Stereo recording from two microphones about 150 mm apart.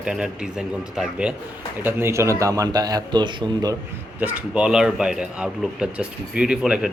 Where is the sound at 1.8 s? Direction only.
15° right (ahead or behind).